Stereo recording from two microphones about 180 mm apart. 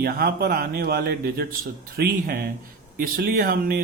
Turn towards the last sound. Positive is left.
turn(degrees=-55)  # may be behind; listen again after turning